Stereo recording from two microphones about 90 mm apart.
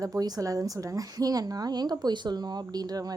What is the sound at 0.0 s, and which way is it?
A woman's voice, 45° right (ahead or behind).